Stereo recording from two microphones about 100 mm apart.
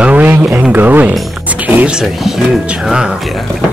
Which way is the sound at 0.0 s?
15° right (ahead or behind).